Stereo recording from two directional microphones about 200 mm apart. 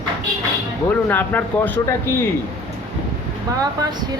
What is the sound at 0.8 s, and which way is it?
Speech, 10° left (ahead or behind).